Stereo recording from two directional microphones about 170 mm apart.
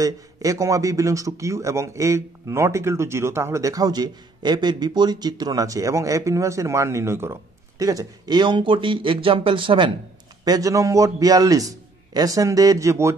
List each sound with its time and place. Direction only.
0.0 s speech: 20° right (ahead or behind)